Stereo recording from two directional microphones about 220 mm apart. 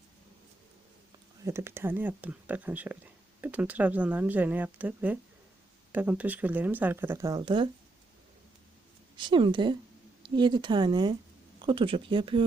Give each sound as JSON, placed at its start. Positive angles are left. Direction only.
{"t": 1.5, "sound": "speech", "side_deg": -10}
{"t": 9.1, "sound": "speech", "side_deg": -20}